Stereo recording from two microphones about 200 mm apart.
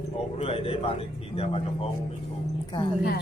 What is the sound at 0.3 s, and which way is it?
Speech, 30° left (ahead or behind).